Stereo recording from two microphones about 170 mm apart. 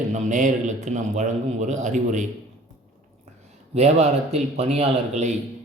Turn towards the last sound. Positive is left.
turn(degrees=-40)  # may be behind; listen again after turning